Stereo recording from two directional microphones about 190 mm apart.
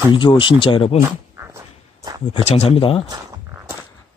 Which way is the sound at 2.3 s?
30° left (ahead or behind).